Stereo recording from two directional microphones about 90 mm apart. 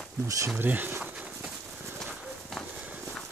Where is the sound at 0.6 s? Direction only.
20° right (ahead or behind).